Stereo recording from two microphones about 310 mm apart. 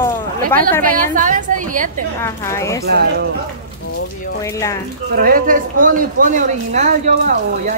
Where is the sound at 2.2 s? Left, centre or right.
Centre.